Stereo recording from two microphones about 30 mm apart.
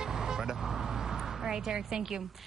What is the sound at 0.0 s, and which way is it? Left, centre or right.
Vehicle, centre.